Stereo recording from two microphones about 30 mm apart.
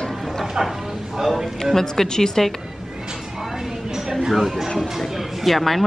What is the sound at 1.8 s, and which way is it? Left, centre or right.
Speech, centre.